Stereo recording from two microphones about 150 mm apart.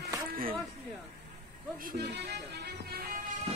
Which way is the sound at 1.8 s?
90° right.